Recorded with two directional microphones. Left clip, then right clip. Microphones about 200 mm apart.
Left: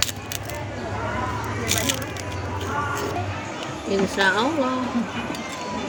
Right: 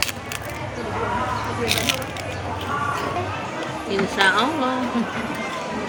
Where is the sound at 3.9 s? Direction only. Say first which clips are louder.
Right 2 dB; 30° left (ahead or behind).